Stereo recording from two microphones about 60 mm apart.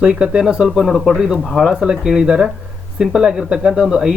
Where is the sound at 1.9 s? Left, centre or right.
Centre.